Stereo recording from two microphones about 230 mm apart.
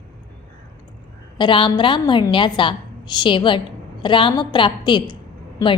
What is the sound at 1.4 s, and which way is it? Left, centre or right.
A woman's voice, left.